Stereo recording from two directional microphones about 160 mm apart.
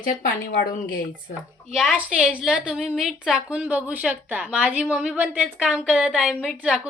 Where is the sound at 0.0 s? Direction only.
60° left (ahead or behind).